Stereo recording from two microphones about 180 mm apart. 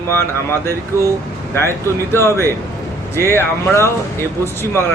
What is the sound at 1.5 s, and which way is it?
Speech, 15° left (ahead or behind).